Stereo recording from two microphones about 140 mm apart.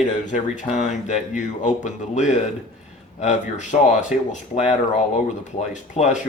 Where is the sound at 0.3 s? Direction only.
60° left (ahead or behind).